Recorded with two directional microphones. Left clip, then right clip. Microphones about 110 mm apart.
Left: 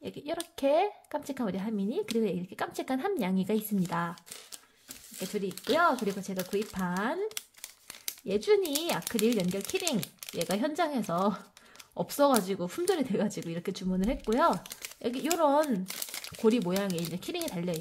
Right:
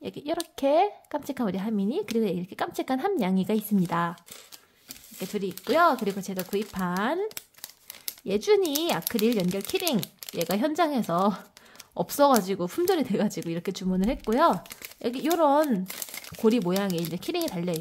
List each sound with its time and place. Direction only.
0.0 s speech: 35° right (ahead or behind)
5.2 s speech: 35° right (ahead or behind)